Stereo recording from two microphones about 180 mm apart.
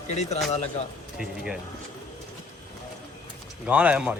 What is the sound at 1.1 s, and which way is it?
Speech, 5° right (ahead or behind).